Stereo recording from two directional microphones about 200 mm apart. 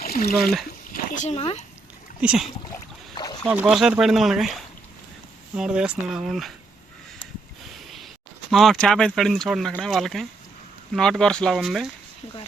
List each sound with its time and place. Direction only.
0.0 s a sound: 50° left (ahead or behind)
1.1 s speech: 35° left (ahead or behind)
2.2 s speech: 5° right (ahead or behind)
7.9 s speech: centre (ahead or behind)